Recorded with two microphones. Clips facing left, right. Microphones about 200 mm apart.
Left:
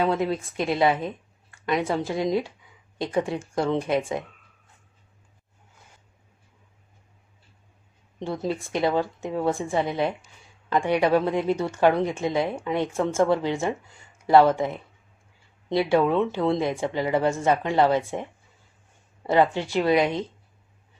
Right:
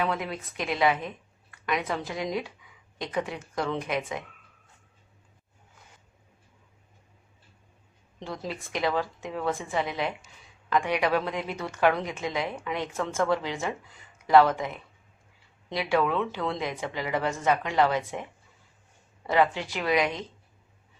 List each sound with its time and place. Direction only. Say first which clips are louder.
0.0 s a woman's voice: left 6 dB; 30° left (ahead or behind)
8.4 s a woman's voice: left 5 dB; 25° left (ahead or behind)
19.3 s a woman's voice: left 4 dB; 25° left (ahead or behind)